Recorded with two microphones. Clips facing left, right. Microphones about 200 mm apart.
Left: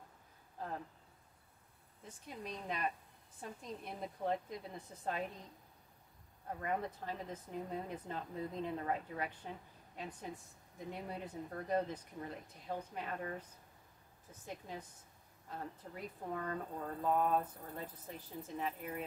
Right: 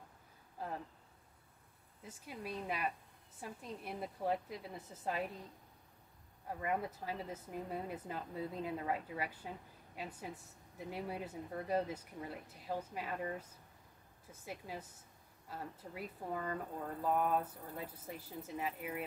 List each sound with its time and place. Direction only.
2.0 s speech: 5° right (ahead or behind)
6.6 s speech: 5° right (ahead or behind)